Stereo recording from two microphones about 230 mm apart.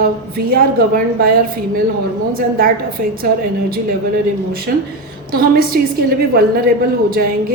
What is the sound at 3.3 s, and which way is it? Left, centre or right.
Speech, right.